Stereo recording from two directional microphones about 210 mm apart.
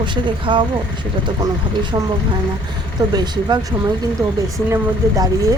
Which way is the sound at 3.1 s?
20° right (ahead or behind).